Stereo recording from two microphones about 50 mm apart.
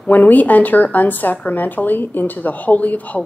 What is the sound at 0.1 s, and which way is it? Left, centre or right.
Speech, left.